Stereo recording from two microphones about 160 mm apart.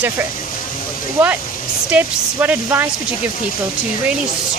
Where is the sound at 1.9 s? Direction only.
10° right (ahead or behind).